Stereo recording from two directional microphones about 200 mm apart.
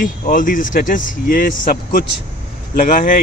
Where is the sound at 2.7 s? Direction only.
45° left (ahead or behind).